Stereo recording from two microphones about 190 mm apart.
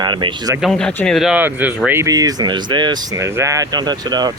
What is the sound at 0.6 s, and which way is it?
Speech, centre (ahead or behind).